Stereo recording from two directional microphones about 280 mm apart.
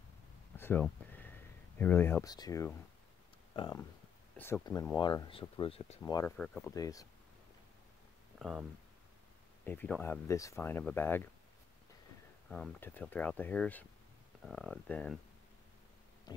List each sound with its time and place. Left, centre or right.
0.6 s a sound: centre
1.8 s speech: centre
6.3 s speech: centre
8.4 s speech: centre
9.7 s speech: centre
12.4 s speech: centre
16.3 s a sound: centre